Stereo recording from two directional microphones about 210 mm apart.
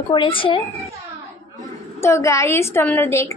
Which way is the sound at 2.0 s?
15° left (ahead or behind).